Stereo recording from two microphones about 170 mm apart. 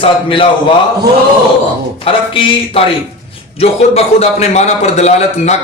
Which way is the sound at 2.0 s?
30° left (ahead or behind).